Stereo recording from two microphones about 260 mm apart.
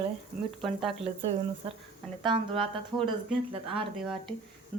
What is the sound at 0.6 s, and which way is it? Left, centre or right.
Speech, centre.